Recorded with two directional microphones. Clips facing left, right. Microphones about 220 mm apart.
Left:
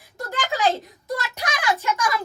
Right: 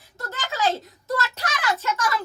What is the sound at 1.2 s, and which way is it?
A woman's voice, 15° left (ahead or behind).